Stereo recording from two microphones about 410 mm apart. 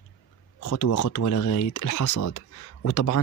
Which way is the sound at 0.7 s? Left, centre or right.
Left.